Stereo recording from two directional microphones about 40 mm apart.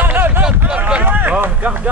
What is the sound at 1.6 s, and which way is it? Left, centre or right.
Speech, right.